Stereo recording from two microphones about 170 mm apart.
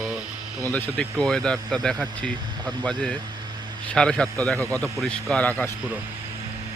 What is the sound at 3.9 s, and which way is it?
Speech, 5° left (ahead or behind).